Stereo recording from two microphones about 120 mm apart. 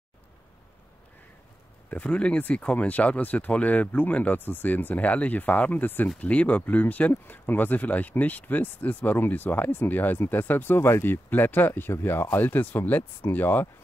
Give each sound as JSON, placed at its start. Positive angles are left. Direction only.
{"t": 1.9, "sound": "speech", "side_deg": 10}